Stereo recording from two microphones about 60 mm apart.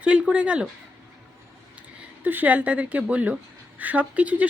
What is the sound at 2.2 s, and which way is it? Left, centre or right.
A woman's voice, right.